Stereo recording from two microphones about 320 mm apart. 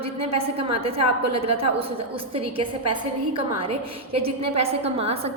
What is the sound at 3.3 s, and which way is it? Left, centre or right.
A woman's voice, centre.